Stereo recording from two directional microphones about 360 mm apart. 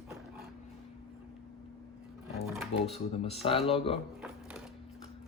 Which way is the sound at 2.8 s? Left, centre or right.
Centre.